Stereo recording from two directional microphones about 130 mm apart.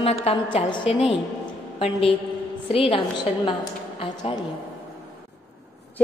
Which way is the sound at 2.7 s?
40° left (ahead or behind).